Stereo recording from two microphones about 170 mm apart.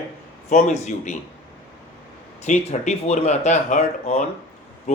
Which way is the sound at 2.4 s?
40° left (ahead or behind).